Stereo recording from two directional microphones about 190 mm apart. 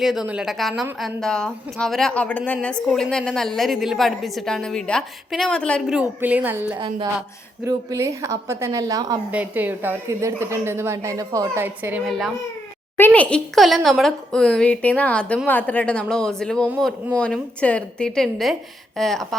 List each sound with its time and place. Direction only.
0.0 s a woman's voice: centre (ahead or behind)
5.9 s a woman's voice: 5° right (ahead or behind)
6.7 s a woman's voice: 25° right (ahead or behind)
9.3 s a woman's voice: 10° right (ahead or behind)
13.0 s a woman's voice: 10° left (ahead or behind)